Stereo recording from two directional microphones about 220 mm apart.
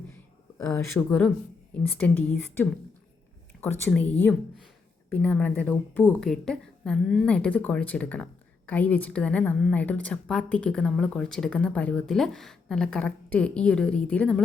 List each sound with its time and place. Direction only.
0.7 s speech: 5° left (ahead or behind)
3.6 s speech: 10° left (ahead or behind)